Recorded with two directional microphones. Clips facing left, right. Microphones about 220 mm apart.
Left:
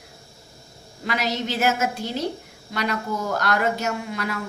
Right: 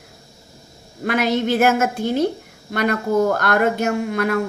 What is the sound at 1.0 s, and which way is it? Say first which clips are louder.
Speech: right 7 dB; 55° right (ahead or behind).